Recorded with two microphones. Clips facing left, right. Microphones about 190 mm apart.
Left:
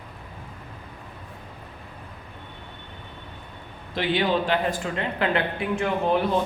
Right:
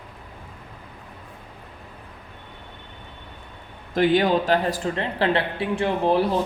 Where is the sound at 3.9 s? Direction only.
45° right (ahead or behind).